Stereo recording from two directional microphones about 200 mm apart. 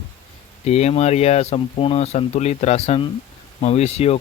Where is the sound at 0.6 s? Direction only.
30° left (ahead or behind).